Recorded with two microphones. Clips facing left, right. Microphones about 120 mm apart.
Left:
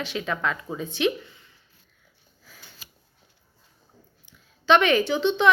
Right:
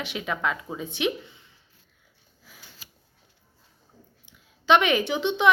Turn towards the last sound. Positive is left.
turn(degrees=-15)  # may be behind; listen again after turning